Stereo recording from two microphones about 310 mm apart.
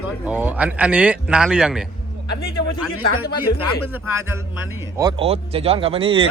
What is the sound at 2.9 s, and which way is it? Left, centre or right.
Speech, left.